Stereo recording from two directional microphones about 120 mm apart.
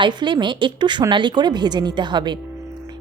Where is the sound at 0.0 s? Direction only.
40° right (ahead or behind).